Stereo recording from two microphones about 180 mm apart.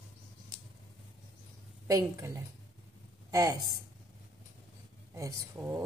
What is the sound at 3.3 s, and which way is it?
Speech, 20° right (ahead or behind).